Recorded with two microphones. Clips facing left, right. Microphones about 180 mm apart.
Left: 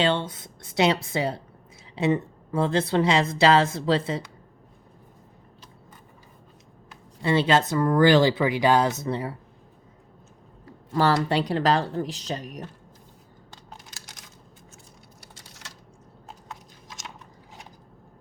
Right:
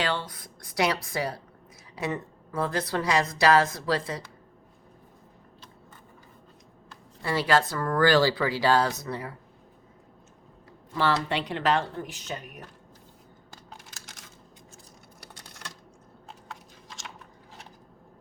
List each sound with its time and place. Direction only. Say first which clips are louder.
0.0 s a woman's voice: left 6 dB; 25° left (ahead or behind)
7.2 s a woman's voice: left 3 dB; 20° left (ahead or behind)
10.9 s speech: left 4 dB; 40° left (ahead or behind)
15.2 s keys jangling: right 4 dB; 65° right (ahead or behind)